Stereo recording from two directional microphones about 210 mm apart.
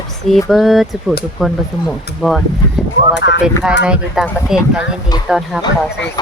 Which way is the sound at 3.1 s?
55° left (ahead or behind).